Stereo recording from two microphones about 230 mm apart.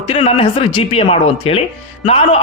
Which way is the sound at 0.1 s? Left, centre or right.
Left.